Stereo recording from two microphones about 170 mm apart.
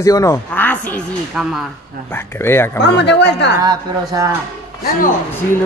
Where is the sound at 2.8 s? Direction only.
85° left.